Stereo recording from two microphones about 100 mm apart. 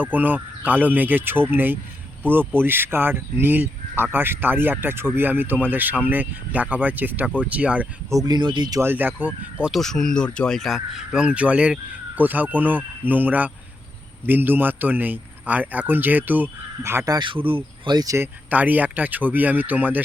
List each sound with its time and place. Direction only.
0.0 s speech: 15° right (ahead or behind)
8.1 s speech: 45° right (ahead or behind)
8.8 s speech: 20° right (ahead or behind)
9.7 s speech: 5° left (ahead or behind); by 17.1 s 25° right (ahead or behind)
17.1 s speech: 50° right (ahead or behind)
17.9 s speech: 35° right (ahead or behind)
18.2 s speech: 15° right (ahead or behind)